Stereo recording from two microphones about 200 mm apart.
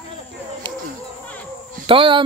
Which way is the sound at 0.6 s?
25° right (ahead or behind).